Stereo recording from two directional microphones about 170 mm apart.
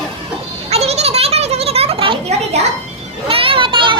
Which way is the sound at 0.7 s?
40° right (ahead or behind).